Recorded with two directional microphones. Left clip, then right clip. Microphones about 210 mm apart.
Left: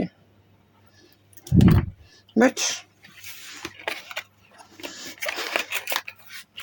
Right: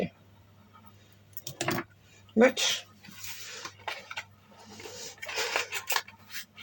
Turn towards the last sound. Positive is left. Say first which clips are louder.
# left 4 dB
turn(degrees=50)  # may be behind; listen again after turning